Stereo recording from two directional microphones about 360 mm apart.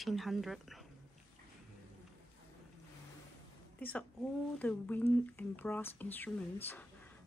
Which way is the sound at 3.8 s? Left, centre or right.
Centre.